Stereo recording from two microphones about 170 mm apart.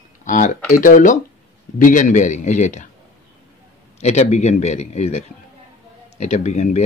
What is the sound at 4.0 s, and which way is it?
Speech, 40° left (ahead or behind).